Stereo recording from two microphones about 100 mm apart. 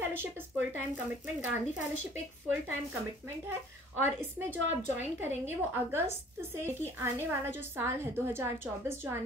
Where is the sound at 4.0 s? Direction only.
20° right (ahead or behind).